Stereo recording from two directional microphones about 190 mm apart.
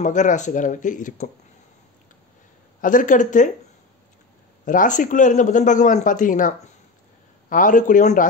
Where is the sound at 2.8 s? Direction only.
45° left (ahead or behind).